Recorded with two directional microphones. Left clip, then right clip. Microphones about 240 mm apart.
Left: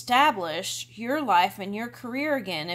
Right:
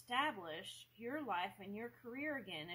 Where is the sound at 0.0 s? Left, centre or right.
Left.